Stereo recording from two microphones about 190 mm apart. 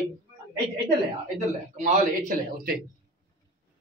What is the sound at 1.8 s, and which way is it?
A man's voice, 50° right (ahead or behind).